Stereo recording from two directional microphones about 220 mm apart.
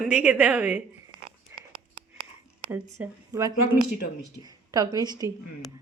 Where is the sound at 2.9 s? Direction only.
15° right (ahead or behind).